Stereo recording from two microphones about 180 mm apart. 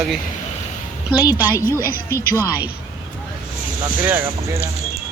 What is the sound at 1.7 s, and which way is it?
Speech, 15° right (ahead or behind).